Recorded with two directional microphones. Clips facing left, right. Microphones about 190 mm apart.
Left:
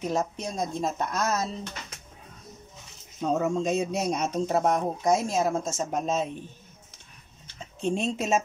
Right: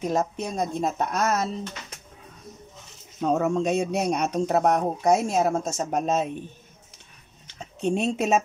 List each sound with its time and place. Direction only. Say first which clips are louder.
0.1 s speech: right 3 dB; 60° right (ahead or behind)
3.2 s speech: right 3 dB; 60° right (ahead or behind)
7.8 s speech: right 3 dB; 65° right (ahead or behind)